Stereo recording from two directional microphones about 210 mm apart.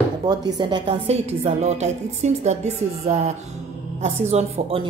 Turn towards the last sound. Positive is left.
turn(degrees=-30)  # may be behind; listen again after turning